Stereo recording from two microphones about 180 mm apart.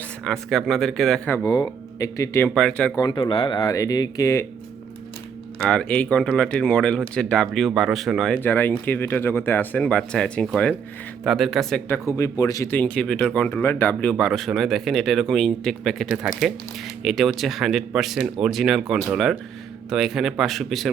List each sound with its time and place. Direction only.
0.3 s speech: centre (ahead or behind)
1.5 s speech: 20° left (ahead or behind); by 2.9 s 5° left (ahead or behind)
2.9 s speech: 20° left (ahead or behind)
5.6 s speech: 5° left (ahead or behind)
8.4 s speech: 10° left (ahead or behind)
12.1 s speech: 20° left (ahead or behind); by 20.9 s centre (ahead or behind)